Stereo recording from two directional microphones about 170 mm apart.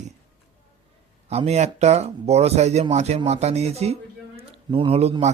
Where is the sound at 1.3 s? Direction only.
40° right (ahead or behind).